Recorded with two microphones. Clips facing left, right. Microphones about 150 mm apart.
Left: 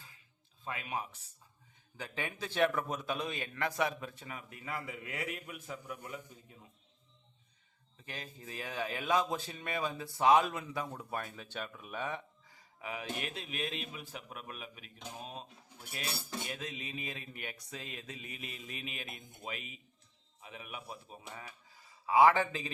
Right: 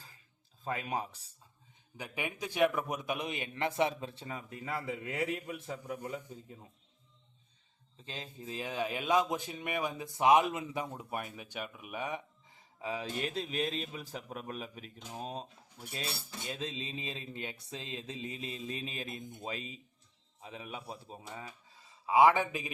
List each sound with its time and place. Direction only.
0.6 s speech: 40° right (ahead or behind)
2.0 s a man's voice: 15° right (ahead or behind)
8.0 s speech: 20° right (ahead or behind)
12.5 s speech: 30° right (ahead or behind)
16.5 s a man's voice: 25° right (ahead or behind)